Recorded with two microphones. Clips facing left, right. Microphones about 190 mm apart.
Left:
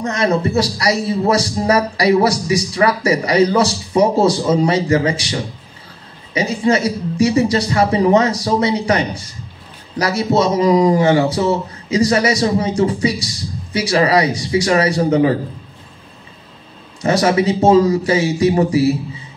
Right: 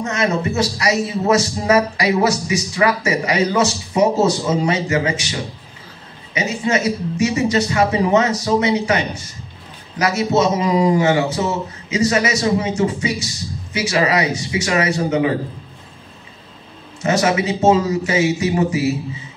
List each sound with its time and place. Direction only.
0.0 s a man's voice: 35° left (ahead or behind)
6.3 s a man's voice: 30° left (ahead or behind)
17.0 s a man's voice: 35° left (ahead or behind)